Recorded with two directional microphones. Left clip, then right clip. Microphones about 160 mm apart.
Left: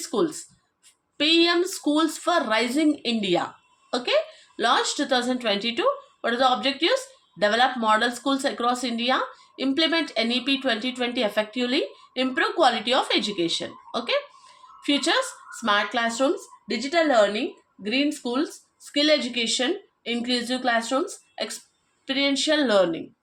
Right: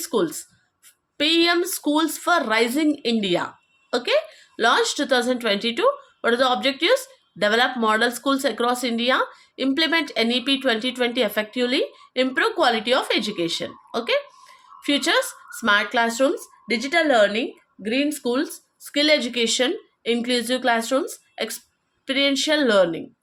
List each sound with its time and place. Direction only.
0.0 s speech: 45° right (ahead or behind)